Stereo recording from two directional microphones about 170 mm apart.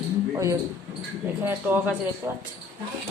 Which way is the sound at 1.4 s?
10° right (ahead or behind).